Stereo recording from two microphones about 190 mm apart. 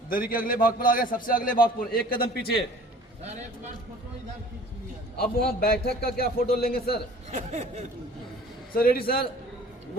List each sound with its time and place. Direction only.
0.1 s a man's voice: 50° left (ahead or behind)
5.2 s a man's voice: 55° left (ahead or behind)
7.3 s a sound: 35° right (ahead or behind)
8.7 s a man's voice: 50° left (ahead or behind)